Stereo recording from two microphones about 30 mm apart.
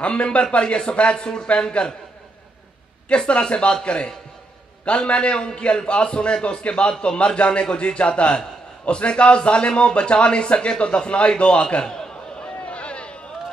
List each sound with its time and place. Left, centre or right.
0.0 s a man's voice: left
3.3 s a man's voice: left
11.8 s a man's voice: centre
12.4 s a sound: left